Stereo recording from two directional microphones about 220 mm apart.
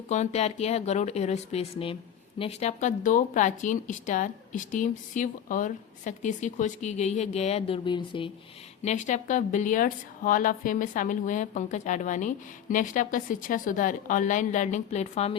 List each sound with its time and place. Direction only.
0.1 s speech: 30° left (ahead or behind)
8.8 s speech: 30° left (ahead or behind)